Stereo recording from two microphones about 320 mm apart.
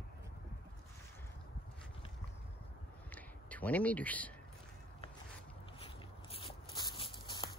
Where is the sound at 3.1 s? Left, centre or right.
Centre.